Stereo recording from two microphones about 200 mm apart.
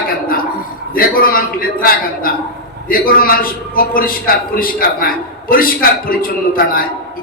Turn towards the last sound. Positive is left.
turn(degrees=45)  # may be behind; listen again after turning